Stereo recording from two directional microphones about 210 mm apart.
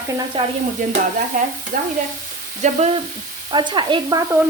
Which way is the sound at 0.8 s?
40° right (ahead or behind).